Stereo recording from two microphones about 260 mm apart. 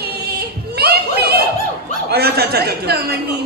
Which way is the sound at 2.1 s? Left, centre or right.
Right.